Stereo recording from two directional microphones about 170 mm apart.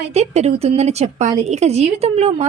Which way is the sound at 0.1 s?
40° right (ahead or behind).